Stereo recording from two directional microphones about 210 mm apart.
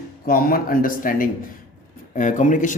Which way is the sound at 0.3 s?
45° left (ahead or behind).